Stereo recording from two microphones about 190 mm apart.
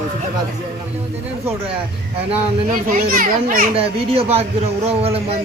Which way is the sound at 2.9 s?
50° right (ahead or behind).